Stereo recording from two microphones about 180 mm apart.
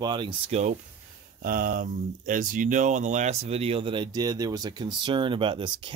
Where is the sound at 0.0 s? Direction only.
25° right (ahead or behind).